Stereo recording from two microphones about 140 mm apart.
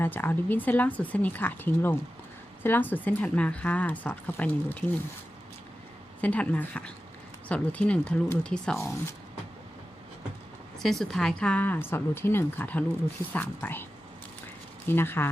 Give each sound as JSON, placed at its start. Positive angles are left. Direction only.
{"t": 0.0, "sound": "speech", "side_deg": 15}
{"t": 6.2, "sound": "speech", "side_deg": 10}
{"t": 10.8, "sound": "speech", "side_deg": 0}
{"t": 14.8, "sound": "speech", "side_deg": 15}